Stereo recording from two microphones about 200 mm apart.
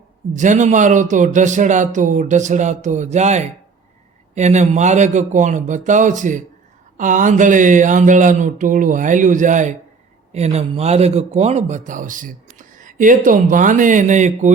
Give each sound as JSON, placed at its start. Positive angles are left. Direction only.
{"t": 0.3, "sound": "speech", "side_deg": -40}